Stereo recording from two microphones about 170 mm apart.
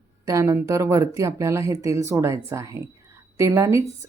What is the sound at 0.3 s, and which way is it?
Speech, 15° right (ahead or behind).